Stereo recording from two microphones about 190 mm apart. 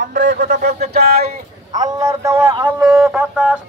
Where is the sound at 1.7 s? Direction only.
20° right (ahead or behind).